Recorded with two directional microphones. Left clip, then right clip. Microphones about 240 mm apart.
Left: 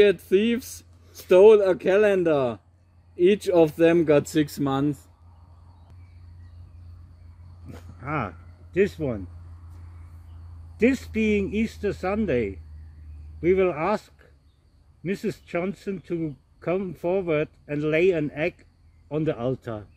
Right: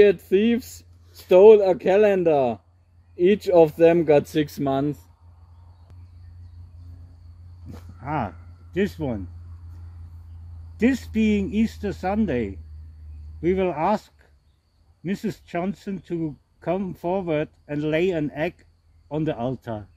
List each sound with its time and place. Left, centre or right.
0.0 s speech: centre
7.7 s a sound: centre
10.8 s speech: centre